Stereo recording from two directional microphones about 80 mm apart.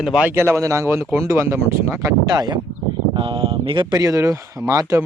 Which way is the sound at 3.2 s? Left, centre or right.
Right.